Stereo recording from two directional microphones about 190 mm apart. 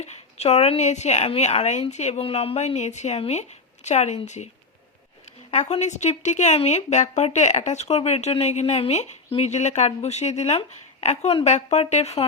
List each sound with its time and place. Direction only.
0.0 s a woman's voice: 35° left (ahead or behind)
5.5 s a woman's voice: 35° left (ahead or behind)